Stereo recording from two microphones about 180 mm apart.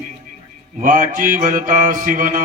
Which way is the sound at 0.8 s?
50° right (ahead or behind).